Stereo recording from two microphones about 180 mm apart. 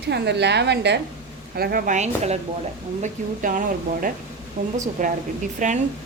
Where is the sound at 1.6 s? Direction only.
55° right (ahead or behind).